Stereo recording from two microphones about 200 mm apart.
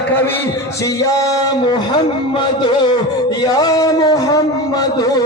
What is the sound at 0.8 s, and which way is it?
Music, 15° left (ahead or behind).